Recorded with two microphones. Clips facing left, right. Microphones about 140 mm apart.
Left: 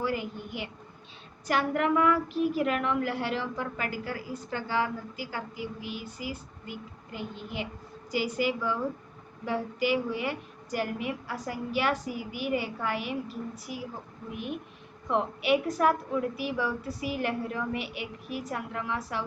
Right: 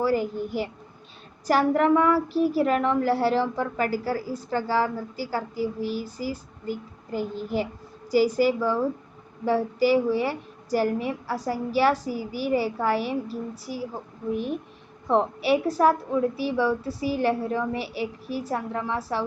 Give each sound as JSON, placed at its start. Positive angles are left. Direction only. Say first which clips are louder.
{"t": 0.0, "sound": "a woman's voice", "louder": "right 8 dB", "side_deg": -35}